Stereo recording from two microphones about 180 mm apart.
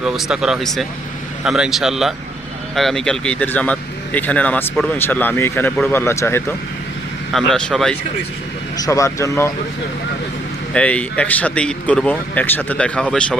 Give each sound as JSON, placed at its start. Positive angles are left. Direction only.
{"t": 0.0, "sound": "speech", "side_deg": -5}
{"t": 7.3, "sound": "speech", "side_deg": 0}
{"t": 8.8, "sound": "speech", "side_deg": 15}
{"t": 10.8, "sound": "speech", "side_deg": 5}